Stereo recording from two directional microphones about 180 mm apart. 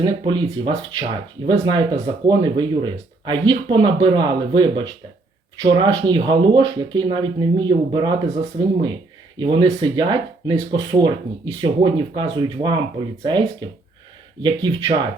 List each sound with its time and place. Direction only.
0.0 s speech: 25° right (ahead or behind)
9.4 s speech: 25° right (ahead or behind)